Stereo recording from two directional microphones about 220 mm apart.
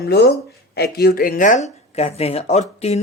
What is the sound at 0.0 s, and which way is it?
A woman's voice, 45° left (ahead or behind).